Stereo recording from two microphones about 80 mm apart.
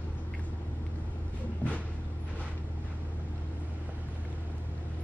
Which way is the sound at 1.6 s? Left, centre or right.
Left.